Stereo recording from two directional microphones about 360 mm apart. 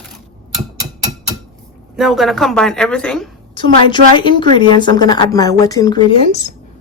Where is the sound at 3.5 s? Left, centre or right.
Centre.